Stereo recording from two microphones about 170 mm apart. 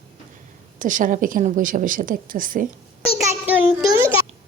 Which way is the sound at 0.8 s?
50° right (ahead or behind).